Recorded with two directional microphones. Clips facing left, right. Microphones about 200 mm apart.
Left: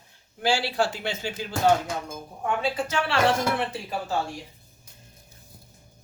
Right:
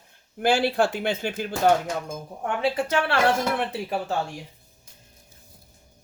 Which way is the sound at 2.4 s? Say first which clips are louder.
Right 2 dB; 60° right (ahead or behind).